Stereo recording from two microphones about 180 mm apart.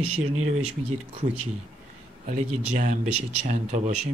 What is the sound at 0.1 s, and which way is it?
Speech, 40° right (ahead or behind).